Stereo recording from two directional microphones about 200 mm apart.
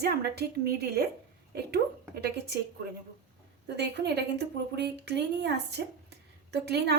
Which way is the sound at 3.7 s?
55° right (ahead or behind).